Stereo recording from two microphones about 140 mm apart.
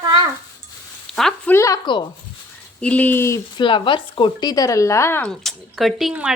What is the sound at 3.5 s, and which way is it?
Speech, 35° left (ahead or behind).